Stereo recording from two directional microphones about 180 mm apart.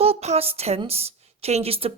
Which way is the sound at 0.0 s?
35° right (ahead or behind).